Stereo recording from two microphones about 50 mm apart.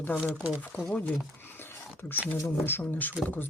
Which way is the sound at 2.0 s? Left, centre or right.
Left.